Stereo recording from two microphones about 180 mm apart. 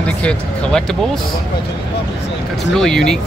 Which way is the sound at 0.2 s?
5° left (ahead or behind).